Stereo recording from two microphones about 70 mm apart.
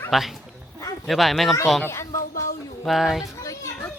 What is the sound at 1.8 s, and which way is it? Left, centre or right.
Speech, left.